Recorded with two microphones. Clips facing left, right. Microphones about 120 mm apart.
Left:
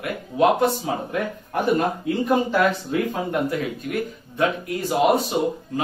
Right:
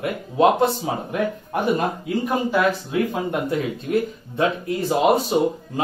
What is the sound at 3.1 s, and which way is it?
Speech, 25° right (ahead or behind).